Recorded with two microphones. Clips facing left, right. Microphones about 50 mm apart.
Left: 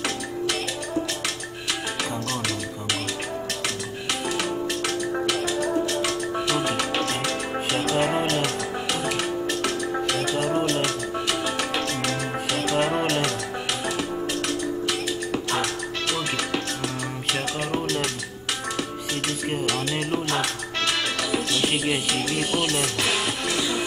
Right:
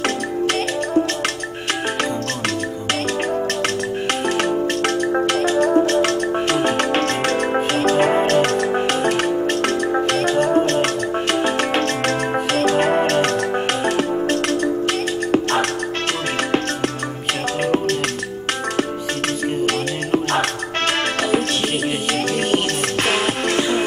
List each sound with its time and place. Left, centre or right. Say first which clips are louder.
5.1 s music: right 7 dB; right
19.6 s music: right 5 dB; right
23.0 s music: right 6 dB; right